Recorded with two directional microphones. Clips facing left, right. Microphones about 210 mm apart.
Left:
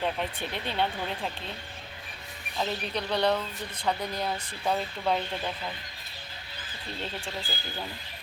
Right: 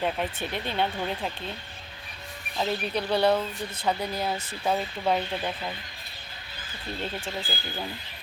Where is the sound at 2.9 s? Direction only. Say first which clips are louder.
Right 4 dB; 5° right (ahead or behind).